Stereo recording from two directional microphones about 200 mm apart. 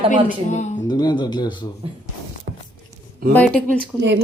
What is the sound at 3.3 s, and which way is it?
Speech, 5° left (ahead or behind).